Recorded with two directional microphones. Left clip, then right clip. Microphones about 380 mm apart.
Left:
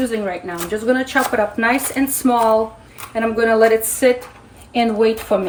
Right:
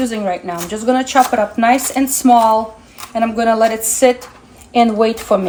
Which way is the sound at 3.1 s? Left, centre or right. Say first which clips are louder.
Right 1 dB; centre.